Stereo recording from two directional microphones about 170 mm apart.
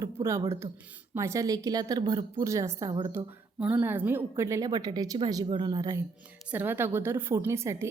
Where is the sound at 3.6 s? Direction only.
10° right (ahead or behind).